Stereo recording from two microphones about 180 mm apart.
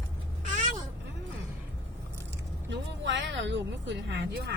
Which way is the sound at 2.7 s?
85° right.